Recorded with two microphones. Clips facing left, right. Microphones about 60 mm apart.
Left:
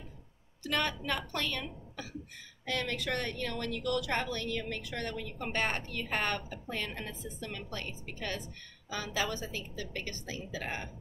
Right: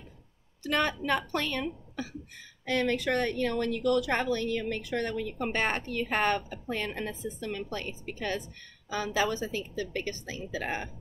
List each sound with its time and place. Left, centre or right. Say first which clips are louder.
0.7 s a woman's voice: right 5 dB; right